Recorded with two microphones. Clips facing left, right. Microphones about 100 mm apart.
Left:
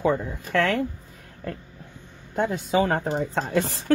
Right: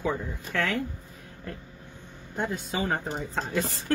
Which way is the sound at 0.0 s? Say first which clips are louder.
Left 6 dB; 65° left (ahead or behind).